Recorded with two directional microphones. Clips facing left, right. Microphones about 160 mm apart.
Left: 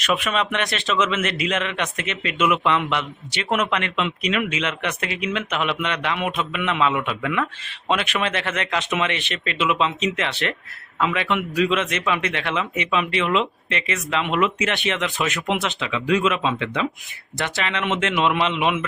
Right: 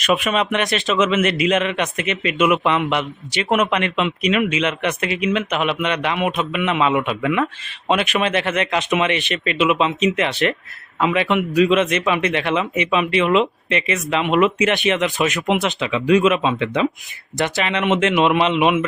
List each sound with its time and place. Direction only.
0.0 s speech: 15° right (ahead or behind)